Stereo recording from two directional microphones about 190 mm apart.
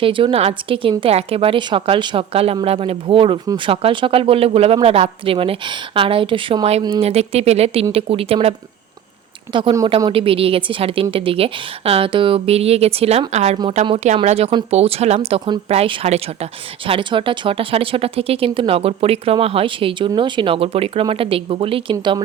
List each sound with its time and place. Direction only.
0.0 s speech: 30° right (ahead or behind)